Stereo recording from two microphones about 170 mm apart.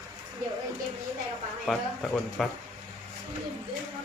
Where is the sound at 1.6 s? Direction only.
Centre (ahead or behind).